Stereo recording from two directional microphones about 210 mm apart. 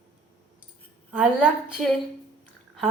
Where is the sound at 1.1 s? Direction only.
5° right (ahead or behind).